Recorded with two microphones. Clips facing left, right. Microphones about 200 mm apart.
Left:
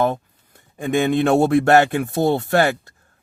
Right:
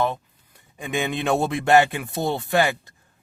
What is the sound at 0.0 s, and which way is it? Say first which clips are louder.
Speech: left 4 dB; 45° left (ahead or behind).